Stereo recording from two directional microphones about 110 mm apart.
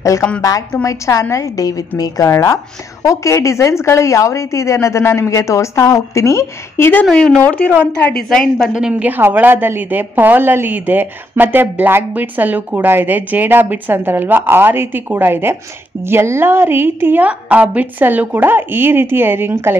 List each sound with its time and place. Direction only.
0.4 s a woman's voice: 30° left (ahead or behind)
7.1 s a woman's voice: 5° left (ahead or behind); by 19.8 s 20° right (ahead or behind)